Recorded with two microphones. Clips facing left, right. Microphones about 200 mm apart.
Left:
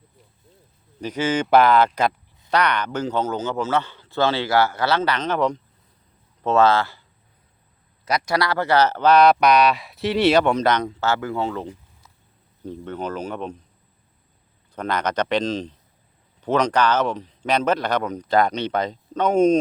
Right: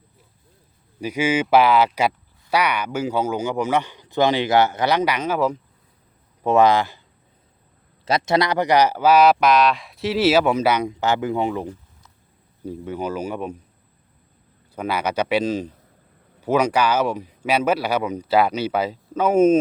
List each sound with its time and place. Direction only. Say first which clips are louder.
1.0 s speech: right 2 dB; 10° right (ahead or behind)
8.0 s speech: right 3 dB; 25° right (ahead or behind); by 13.6 s 10° right (ahead or behind)
14.8 s speech: right 1 dB; 10° right (ahead or behind)